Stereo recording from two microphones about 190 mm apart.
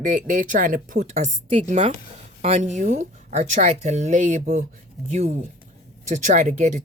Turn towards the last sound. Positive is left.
turn(degrees=-40)  # may be behind; listen again after turning